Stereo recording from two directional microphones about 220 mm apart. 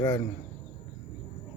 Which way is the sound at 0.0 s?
15° left (ahead or behind).